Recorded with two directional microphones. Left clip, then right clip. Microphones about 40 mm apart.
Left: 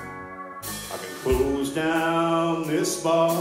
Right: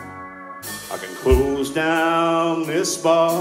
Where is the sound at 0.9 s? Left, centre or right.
Centre.